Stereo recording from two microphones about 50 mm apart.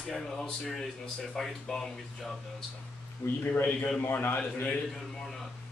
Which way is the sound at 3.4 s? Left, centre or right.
Left.